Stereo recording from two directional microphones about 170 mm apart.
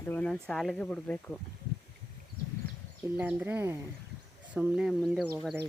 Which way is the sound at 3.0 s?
10° right (ahead or behind).